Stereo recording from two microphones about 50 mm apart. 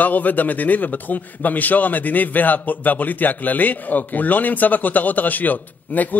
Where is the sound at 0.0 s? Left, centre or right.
Left.